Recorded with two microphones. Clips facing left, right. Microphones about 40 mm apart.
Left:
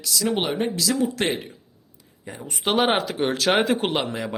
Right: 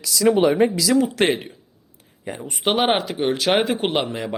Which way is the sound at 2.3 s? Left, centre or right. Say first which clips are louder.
Right 6 dB; right.